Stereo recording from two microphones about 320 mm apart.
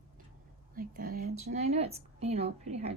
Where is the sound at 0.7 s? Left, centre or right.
Right.